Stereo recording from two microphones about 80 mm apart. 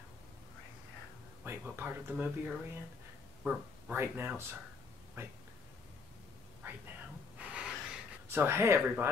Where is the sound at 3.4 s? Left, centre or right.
Right.